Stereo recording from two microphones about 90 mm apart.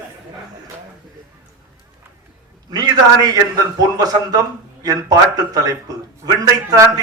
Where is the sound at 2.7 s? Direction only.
45° right (ahead or behind).